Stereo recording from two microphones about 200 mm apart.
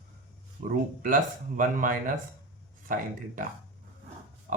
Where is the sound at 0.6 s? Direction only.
45° right (ahead or behind).